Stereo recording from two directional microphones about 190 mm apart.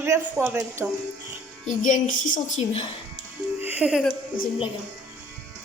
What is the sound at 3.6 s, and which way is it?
Speech, 5° right (ahead or behind).